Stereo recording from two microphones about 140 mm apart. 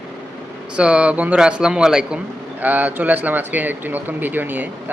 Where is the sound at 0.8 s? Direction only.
10° right (ahead or behind).